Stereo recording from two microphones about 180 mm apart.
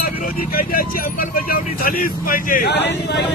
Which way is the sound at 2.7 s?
75° left (ahead or behind).